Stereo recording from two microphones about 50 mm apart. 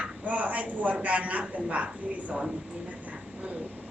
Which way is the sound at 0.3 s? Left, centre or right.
Right.